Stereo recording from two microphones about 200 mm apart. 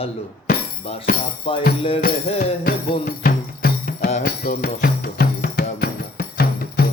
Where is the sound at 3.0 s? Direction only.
45° left (ahead or behind).